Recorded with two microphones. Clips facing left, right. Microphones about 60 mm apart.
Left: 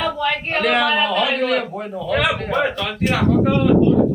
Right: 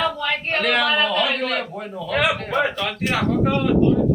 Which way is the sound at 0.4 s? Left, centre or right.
Centre.